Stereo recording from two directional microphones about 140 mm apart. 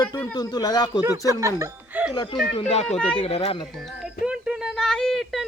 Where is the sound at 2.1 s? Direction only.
35° left (ahead or behind).